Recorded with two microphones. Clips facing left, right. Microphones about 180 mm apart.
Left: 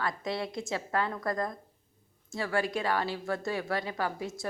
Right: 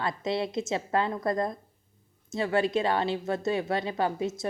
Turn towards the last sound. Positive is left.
turn(degrees=-20)  # may be behind; listen again after turning